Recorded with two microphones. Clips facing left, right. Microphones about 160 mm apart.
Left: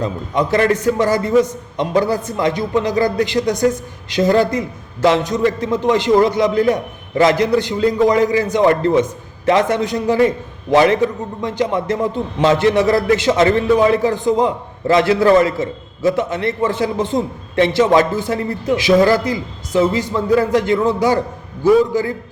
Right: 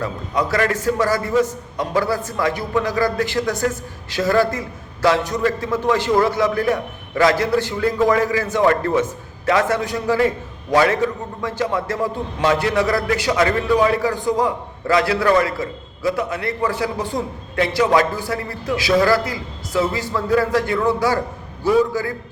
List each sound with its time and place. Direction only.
0.0 s a man's voice: 20° left (ahead or behind)